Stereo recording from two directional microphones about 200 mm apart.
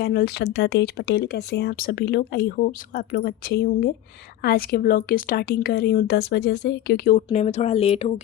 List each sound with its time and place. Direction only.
0.0 s speech: 50° left (ahead or behind)
7.2 s speech: 35° left (ahead or behind)